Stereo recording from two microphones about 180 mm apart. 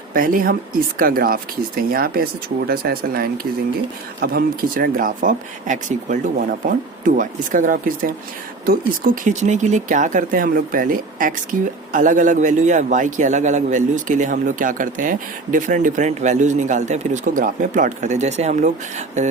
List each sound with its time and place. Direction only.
0.1 s speech: 50° right (ahead or behind)